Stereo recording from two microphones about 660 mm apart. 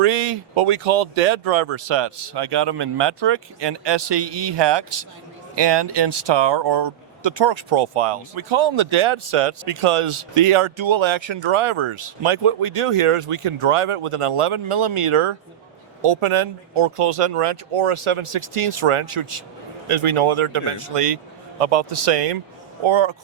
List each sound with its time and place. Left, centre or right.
0.0 s speech: right
0.5 s a man's voice: right
22.8 s speech: right